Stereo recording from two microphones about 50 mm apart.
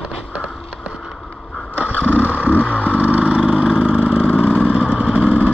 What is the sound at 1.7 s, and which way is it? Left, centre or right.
Motorcycle, right.